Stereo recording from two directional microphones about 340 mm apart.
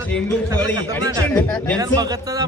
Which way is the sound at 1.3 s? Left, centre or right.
Centre.